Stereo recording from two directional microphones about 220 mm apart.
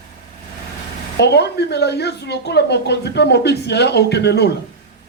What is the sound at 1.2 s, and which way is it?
A woman's voice, 50° left (ahead or behind).